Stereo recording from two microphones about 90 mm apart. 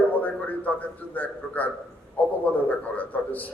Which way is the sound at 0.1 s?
20° left (ahead or behind).